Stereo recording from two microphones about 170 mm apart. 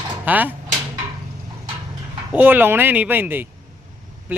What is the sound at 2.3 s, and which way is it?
A man's voice, 10° right (ahead or behind).